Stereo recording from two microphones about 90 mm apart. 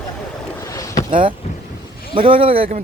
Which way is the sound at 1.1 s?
75° right (ahead or behind).